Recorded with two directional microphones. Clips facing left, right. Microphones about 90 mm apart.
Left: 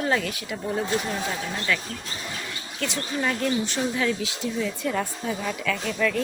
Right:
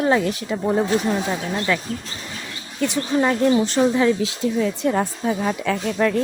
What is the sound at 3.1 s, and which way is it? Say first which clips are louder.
Speech: right 8 dB; 30° right (ahead or behind).